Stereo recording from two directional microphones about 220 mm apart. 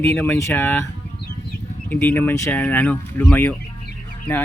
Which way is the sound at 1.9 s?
5° left (ahead or behind).